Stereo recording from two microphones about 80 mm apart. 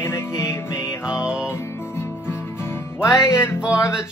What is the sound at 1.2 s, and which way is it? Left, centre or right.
Music, centre.